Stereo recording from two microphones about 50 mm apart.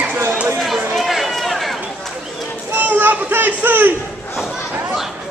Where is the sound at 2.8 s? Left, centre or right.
Right.